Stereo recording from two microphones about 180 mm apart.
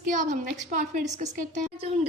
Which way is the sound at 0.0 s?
45° right (ahead or behind).